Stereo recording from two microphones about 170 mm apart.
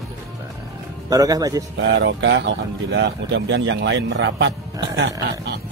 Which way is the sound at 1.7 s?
90° right.